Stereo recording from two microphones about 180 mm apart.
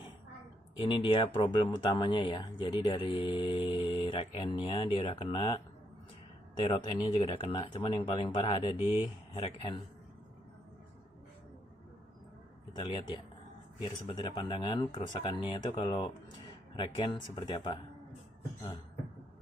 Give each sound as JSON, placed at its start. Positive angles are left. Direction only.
{"t": 0.8, "sound": "speech", "side_deg": 25}
{"t": 6.6, "sound": "speech", "side_deg": 30}
{"t": 12.7, "sound": "speech", "side_deg": 25}